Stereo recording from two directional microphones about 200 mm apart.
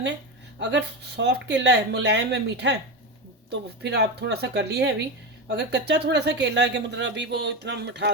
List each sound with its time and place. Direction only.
0.6 s speech: 60° right (ahead or behind)